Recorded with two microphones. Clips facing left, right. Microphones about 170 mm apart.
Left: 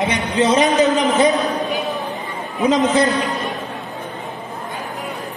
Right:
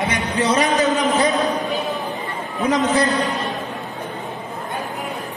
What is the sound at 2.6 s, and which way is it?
Speech, 20° left (ahead or behind).